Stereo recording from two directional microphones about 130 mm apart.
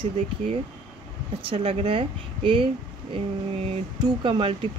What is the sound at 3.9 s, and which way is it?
Speech, 35° right (ahead or behind).